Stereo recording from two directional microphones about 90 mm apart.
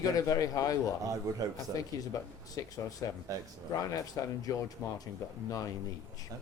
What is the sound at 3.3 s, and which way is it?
Speech, 40° right (ahead or behind).